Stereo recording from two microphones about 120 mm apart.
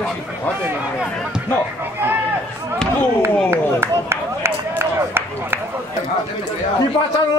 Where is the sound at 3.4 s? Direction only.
20° right (ahead or behind).